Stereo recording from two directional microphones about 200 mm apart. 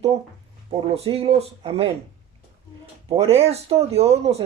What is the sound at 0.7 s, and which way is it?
Speech, 30° right (ahead or behind).